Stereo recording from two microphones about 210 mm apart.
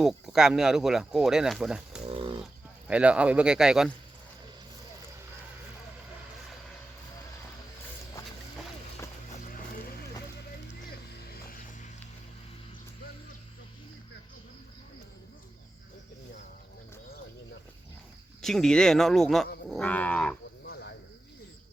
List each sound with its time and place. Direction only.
0.0 s speech: centre (ahead or behind)
2.0 s a sound: 25° right (ahead or behind)
2.4 s speech: 5° right (ahead or behind)
11.3 s music: 40° left (ahead or behind)
18.4 s speech: centre (ahead or behind)
19.7 s livestock: 5° left (ahead or behind)
20.7 s cricket: 55° left (ahead or behind)